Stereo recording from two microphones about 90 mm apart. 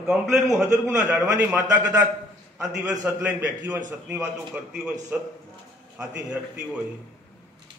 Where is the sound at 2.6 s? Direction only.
10° right (ahead or behind).